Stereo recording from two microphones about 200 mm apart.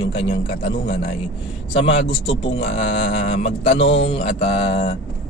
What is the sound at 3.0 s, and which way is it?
Mantra, 30° left (ahead or behind).